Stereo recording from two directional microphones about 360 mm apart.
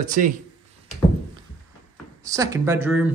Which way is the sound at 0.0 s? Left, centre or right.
Right.